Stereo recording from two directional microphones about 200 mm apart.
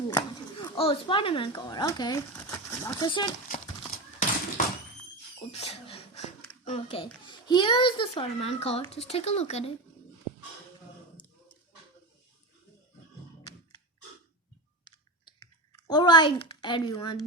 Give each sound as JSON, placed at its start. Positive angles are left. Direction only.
{"t": 0.2, "sound": "speech", "side_deg": 25}
{"t": 3.5, "sound": "clip-clop", "side_deg": 40}
{"t": 5.5, "sound": "a sound", "side_deg": 30}
{"t": 6.7, "sound": "a child's voice", "side_deg": 30}
{"t": 14.8, "sound": "clicking", "side_deg": 20}
{"t": 15.9, "sound": "a child's voice", "side_deg": 20}